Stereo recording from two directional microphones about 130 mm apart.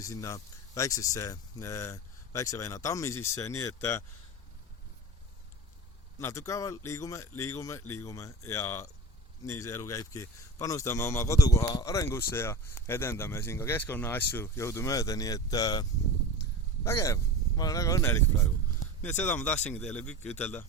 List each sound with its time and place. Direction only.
0.0 s a man's voice: 25° left (ahead or behind)
6.1 s a man's voice: 25° left (ahead or behind)